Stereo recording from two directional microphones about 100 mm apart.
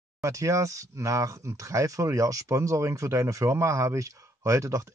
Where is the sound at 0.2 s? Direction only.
30° right (ahead or behind).